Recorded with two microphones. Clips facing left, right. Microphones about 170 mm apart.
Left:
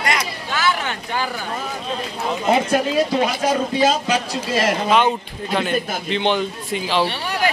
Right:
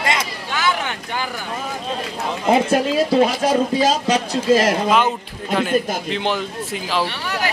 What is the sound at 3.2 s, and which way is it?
A man's voice, 35° right (ahead or behind).